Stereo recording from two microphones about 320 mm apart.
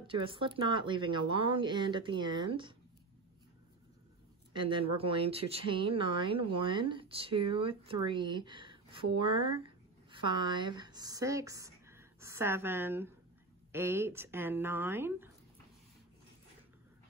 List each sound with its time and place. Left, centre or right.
0.0 s speech: centre
4.6 s speech: centre